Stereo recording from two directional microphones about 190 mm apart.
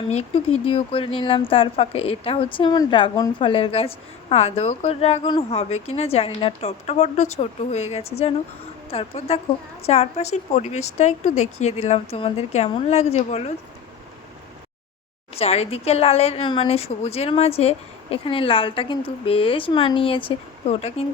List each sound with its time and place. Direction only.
0.1 s a woman's voice: 30° left (ahead or behind)
15.4 s a woman's voice: 35° left (ahead or behind)